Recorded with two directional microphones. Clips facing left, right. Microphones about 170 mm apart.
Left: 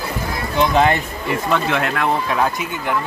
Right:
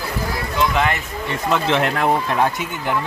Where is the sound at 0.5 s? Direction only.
35° left (ahead or behind).